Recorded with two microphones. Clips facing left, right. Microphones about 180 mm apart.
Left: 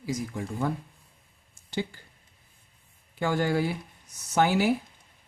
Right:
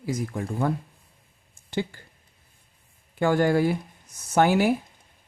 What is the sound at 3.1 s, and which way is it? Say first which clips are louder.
Speech: right 5 dB; 55° right (ahead or behind).